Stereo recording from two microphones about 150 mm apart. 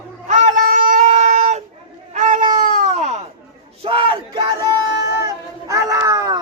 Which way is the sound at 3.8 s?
35° right (ahead or behind).